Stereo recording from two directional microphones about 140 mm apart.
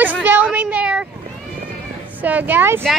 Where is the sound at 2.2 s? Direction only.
10° right (ahead or behind).